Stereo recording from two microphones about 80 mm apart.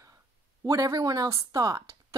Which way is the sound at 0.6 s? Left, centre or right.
Right.